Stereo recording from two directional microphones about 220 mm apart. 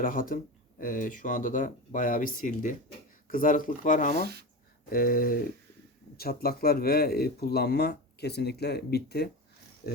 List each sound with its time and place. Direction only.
0.0 s speech: 40° left (ahead or behind)
4.2 s speech: 45° right (ahead or behind)
4.9 s speech: 40° left (ahead or behind)